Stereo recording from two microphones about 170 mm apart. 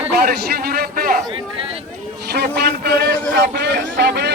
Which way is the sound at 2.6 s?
75° right (ahead or behind).